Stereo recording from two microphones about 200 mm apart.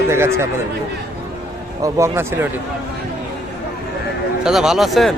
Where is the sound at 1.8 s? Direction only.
15° right (ahead or behind).